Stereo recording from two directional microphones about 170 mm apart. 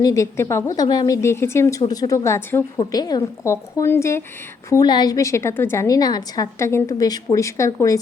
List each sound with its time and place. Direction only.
0.0 s a woman's voice: 20° left (ahead or behind)